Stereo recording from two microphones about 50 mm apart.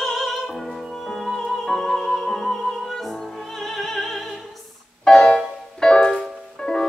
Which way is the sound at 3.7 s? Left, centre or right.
Centre.